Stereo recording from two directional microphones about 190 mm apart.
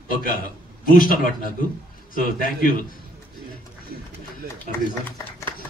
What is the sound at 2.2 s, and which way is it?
Speech, 45° left (ahead or behind).